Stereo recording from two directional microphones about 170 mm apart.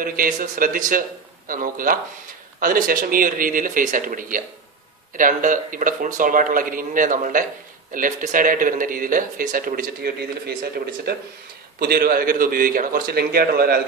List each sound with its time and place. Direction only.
0.0 s a man's voice: 55° right (ahead or behind)